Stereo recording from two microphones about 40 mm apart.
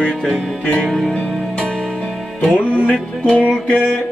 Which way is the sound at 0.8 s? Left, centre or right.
Centre.